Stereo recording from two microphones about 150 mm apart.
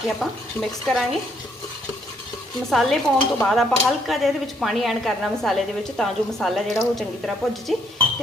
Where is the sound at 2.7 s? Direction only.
Centre (ahead or behind).